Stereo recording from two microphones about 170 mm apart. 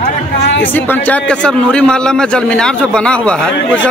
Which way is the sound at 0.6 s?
10° left (ahead or behind).